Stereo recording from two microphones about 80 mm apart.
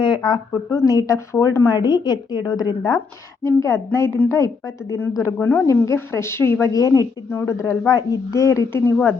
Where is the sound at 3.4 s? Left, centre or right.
Left.